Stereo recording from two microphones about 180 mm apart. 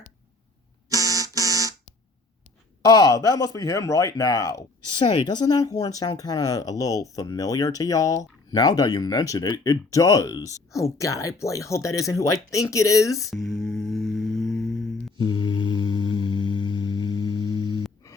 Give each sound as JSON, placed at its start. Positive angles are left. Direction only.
{"t": 0.9, "sound": "alarm", "side_deg": -20}
{"t": 2.8, "sound": "speech", "side_deg": 20}
{"t": 13.3, "sound": "mantra", "side_deg": 0}
{"t": 15.2, "sound": "mantra", "side_deg": 25}